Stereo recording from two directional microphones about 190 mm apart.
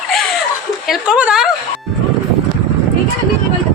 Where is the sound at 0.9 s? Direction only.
5° right (ahead or behind).